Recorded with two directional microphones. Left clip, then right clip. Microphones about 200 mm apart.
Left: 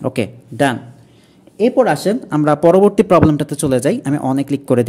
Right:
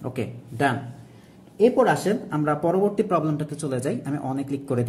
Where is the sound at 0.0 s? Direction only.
45° left (ahead or behind).